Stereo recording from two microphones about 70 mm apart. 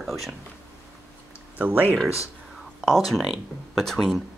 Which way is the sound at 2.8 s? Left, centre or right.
Centre.